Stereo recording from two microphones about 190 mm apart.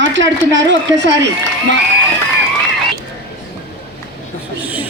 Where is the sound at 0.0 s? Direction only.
75° right (ahead or behind).